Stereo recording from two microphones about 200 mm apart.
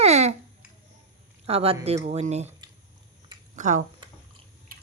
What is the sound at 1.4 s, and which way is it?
Speech, 30° right (ahead or behind).